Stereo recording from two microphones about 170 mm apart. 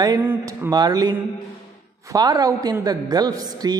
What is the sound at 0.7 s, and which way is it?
A woman's voice, 25° right (ahead or behind).